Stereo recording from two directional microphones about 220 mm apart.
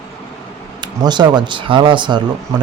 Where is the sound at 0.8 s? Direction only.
20° right (ahead or behind).